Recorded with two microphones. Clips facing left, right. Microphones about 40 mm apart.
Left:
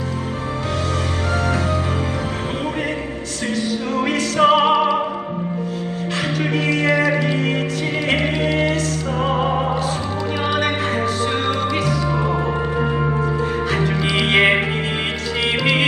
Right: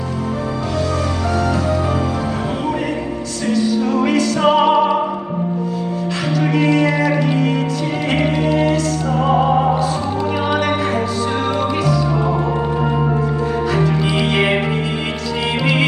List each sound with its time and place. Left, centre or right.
3.5 s music: left
6.7 s music: left
9.5 s music: centre
13.7 s music: left